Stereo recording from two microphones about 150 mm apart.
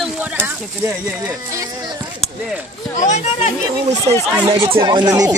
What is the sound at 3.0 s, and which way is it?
Speech, 50° left (ahead or behind).